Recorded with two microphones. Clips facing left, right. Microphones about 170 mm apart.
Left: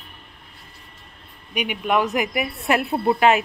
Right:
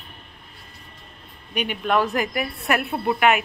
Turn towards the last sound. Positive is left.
turn(degrees=30)  # may be behind; listen again after turning